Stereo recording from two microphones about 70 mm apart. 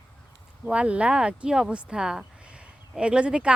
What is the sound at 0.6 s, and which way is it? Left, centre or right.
Speech, centre.